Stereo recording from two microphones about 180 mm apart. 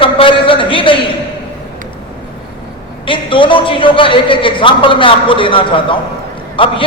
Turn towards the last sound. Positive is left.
turn(degrees=30)  # may be behind; listen again after turning